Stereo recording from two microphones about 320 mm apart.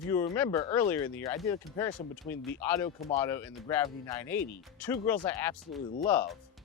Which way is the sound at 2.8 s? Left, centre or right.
Centre.